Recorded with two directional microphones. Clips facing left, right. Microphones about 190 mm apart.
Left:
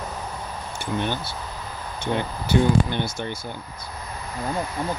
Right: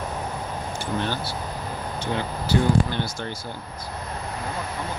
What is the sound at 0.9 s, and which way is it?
Speech, 15° left (ahead or behind).